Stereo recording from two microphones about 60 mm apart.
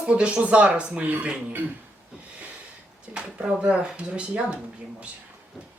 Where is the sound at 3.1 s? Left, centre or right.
Centre.